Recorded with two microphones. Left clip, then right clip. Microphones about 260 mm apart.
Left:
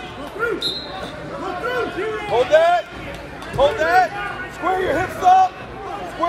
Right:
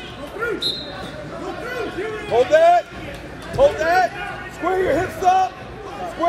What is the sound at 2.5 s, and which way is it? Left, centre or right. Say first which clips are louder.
A man's voice: right 1 dB; right.